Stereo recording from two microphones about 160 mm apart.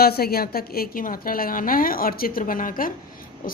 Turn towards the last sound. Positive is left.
turn(degrees=60)  # may be behind; listen again after turning